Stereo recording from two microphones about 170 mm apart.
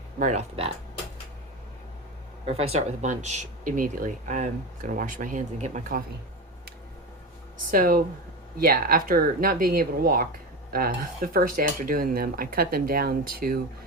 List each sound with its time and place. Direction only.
0.2 s speech: 45° right (ahead or behind)
2.5 s speech: 35° right (ahead or behind)
7.7 s speech: 55° right (ahead or behind)